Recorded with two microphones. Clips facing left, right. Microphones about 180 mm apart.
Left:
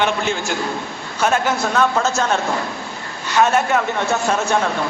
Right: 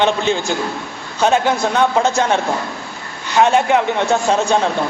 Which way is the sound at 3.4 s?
15° right (ahead or behind).